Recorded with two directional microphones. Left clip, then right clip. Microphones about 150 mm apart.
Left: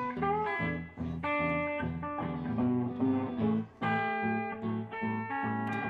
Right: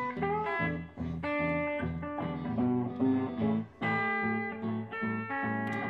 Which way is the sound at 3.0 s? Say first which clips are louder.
Right 1 dB; 5° right (ahead or behind).